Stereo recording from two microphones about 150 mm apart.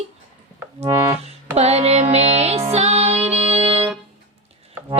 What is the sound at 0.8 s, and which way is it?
Music, 20° right (ahead or behind).